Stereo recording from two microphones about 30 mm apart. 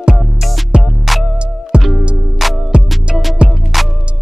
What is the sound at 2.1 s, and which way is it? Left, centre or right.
Music, centre.